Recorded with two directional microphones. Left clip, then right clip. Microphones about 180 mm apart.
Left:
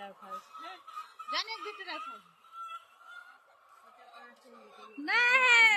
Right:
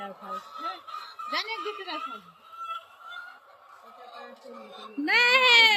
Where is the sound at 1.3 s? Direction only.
Centre (ahead or behind).